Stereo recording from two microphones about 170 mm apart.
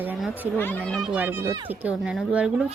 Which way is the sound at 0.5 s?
10° left (ahead or behind).